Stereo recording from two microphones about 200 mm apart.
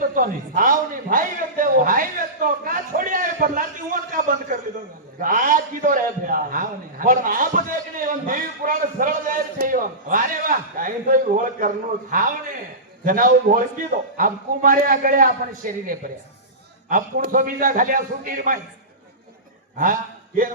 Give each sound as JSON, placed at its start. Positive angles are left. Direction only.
{"t": 0.0, "sound": "a sound", "side_deg": -40}
{"t": 13.1, "sound": "a man's voice", "side_deg": -40}
{"t": 16.9, "sound": "a man's voice", "side_deg": -45}
{"t": 19.8, "sound": "a man's voice", "side_deg": -40}